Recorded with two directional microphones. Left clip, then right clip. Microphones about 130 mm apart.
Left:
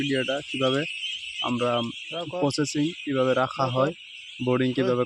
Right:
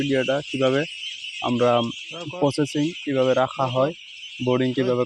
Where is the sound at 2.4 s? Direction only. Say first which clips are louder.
Right 4 dB; 5° left (ahead or behind).